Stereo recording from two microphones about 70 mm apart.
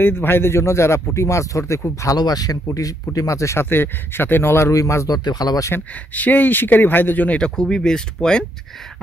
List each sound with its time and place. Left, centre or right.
0.0 s speech: left
2.1 s speech: left
3.6 s speech: left
5.0 s speech: left
6.1 s speech: left